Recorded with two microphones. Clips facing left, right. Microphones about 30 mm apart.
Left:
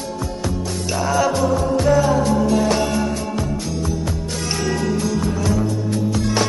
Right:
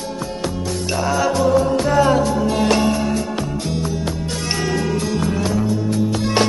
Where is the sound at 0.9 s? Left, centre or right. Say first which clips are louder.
Left 1 dB; centre.